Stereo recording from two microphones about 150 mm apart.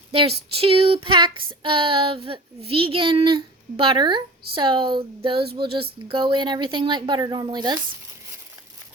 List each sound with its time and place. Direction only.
0.1 s child singing: 40° right (ahead or behind)
5.4 s a sound: 90° right
5.6 s child singing: 35° right (ahead or behind)